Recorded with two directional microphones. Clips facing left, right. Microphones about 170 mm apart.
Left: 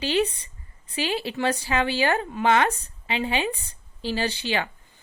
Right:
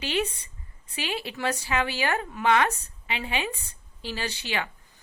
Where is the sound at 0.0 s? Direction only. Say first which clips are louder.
Left 5 dB; 30° left (ahead or behind).